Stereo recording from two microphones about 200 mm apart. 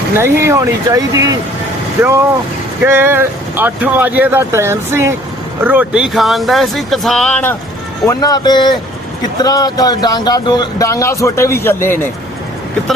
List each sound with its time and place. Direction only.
0.2 s speech: 15° right (ahead or behind)
2.8 s speech: 10° right (ahead or behind); by 7.5 s 5° left (ahead or behind)
8.0 s speech: 20° left (ahead or behind)